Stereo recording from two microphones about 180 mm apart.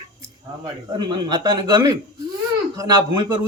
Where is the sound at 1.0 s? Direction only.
25° right (ahead or behind).